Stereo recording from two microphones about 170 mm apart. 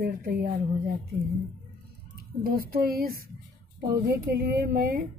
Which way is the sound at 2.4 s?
60° right (ahead or behind).